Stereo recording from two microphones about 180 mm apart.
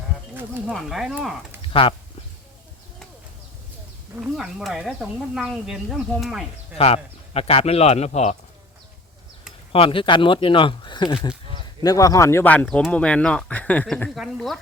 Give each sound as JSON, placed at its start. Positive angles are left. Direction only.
{"t": 0.7, "sound": "speech", "side_deg": 0}
{"t": 1.6, "sound": "speech", "side_deg": 30}
{"t": 4.1, "sound": "speech", "side_deg": -5}
{"t": 6.7, "sound": "speech", "side_deg": 35}
{"t": 9.7, "sound": "speech", "side_deg": 30}